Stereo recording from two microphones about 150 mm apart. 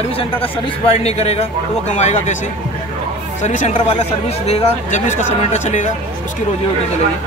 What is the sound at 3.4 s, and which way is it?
Speech, 50° left (ahead or behind).